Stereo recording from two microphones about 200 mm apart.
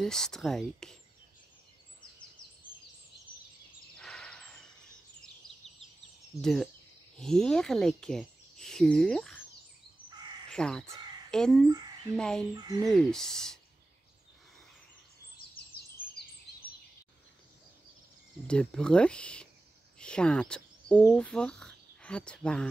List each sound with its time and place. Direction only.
0.0 s speech: centre (ahead or behind)
4.0 s a sound: 5° left (ahead or behind)
6.4 s speech: centre (ahead or behind)
10.5 s speech: 5° left (ahead or behind)
12.5 s speech: 20° right (ahead or behind)
12.8 s speech: centre (ahead or behind)
18.5 s speech: 5° left (ahead or behind)